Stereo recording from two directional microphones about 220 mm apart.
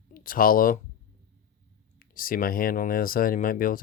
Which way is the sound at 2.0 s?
40° left (ahead or behind).